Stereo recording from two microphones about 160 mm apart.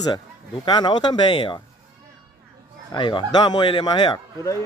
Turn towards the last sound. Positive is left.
turn(degrees=25)  # may be behind; listen again after turning